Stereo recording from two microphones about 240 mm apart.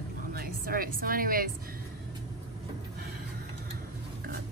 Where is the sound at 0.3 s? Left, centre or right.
Right.